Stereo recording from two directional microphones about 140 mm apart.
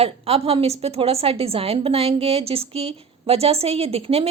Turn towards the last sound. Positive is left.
turn(degrees=-45)  # may be behind; listen again after turning